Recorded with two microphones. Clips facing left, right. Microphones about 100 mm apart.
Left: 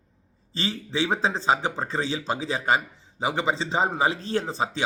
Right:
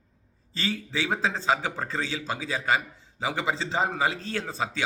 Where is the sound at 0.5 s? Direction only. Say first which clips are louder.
Left 1 dB; 25° left (ahead or behind).